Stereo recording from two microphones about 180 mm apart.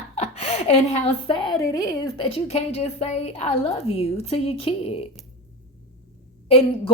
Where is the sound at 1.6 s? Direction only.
20° left (ahead or behind); by 4.9 s 35° left (ahead or behind).